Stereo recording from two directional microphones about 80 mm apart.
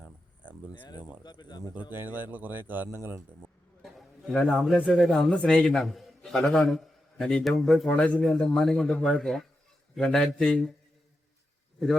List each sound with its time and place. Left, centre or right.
0.0 s a sound: centre
0.7 s speech: left
1.9 s speech: right
3.8 s a man's voice: centre
5.3 s a man's voice: centre
7.9 s a man's voice: centre
8.2 s speech: centre